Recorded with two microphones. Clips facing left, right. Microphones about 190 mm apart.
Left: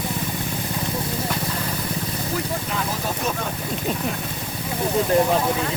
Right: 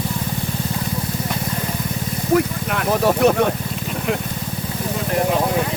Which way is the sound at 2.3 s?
65° right (ahead or behind).